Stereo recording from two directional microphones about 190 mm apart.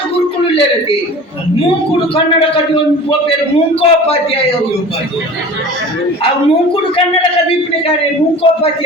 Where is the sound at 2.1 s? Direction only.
30° left (ahead or behind).